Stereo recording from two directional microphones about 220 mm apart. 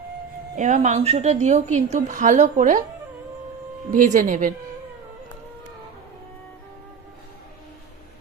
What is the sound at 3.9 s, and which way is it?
Speech, 35° right (ahead or behind).